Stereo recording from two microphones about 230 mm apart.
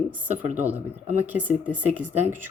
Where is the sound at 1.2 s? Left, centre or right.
Centre.